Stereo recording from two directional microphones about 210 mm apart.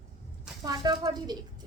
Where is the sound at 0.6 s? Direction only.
20° right (ahead or behind).